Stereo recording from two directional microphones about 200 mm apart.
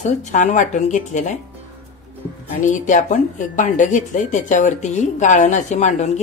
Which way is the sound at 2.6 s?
40° left (ahead or behind).